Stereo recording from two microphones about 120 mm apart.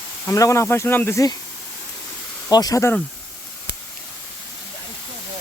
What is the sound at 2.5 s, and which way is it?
Speech, 30° left (ahead or behind).